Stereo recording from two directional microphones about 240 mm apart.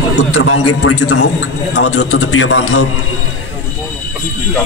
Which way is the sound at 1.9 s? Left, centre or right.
Left.